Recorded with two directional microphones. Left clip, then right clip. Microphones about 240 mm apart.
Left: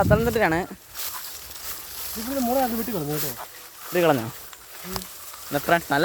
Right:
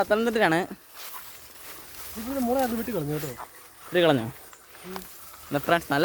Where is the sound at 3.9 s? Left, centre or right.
Right.